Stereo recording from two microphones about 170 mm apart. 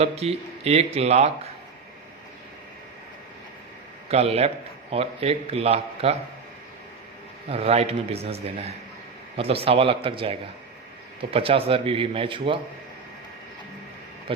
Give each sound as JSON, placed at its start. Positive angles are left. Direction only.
{"t": 0.0, "sound": "a man's voice", "side_deg": -35}
{"t": 4.1, "sound": "a man's voice", "side_deg": -35}
{"t": 7.5, "sound": "a man's voice", "side_deg": -35}
{"t": 14.3, "sound": "speech", "side_deg": -30}